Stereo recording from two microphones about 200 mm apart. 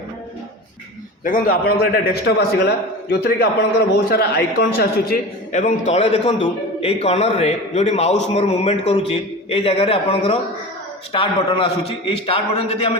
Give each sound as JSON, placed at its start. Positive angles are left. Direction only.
{"t": 1.2, "sound": "a man's voice", "side_deg": 45}